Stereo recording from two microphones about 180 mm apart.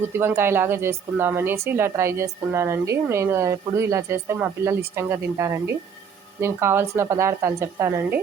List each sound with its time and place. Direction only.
0.1 s a woman's voice: 10° right (ahead or behind)